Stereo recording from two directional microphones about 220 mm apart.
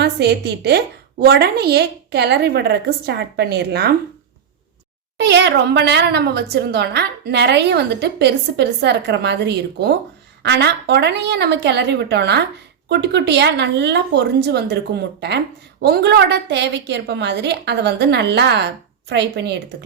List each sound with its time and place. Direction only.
0.0 s a woman's voice: 50° right (ahead or behind)
5.1 s a woman's voice: 50° right (ahead or behind)